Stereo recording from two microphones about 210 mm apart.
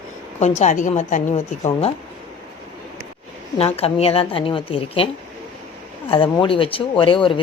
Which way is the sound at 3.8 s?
30° left (ahead or behind).